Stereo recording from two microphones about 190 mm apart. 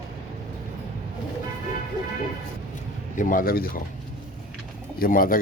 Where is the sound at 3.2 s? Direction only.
45° left (ahead or behind).